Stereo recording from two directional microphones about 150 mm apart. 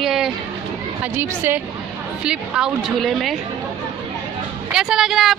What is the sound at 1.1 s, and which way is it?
Speech, 15° right (ahead or behind).